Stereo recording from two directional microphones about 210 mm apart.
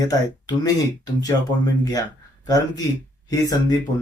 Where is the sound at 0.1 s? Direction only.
15° left (ahead or behind).